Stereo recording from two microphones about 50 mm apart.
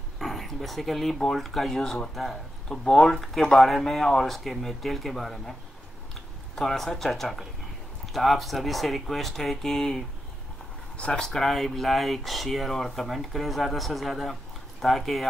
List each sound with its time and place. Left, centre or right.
0.2 s a sound: centre
1.3 s speech: centre
6.5 s speech: centre